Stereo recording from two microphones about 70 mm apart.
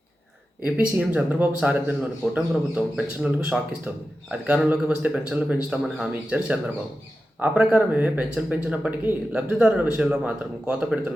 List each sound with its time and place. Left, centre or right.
0.6 s speech: centre
3.5 s speech: centre
4.3 s speech: right